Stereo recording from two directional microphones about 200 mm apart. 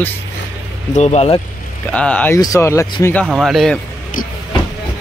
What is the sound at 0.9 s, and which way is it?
Speech, 35° left (ahead or behind).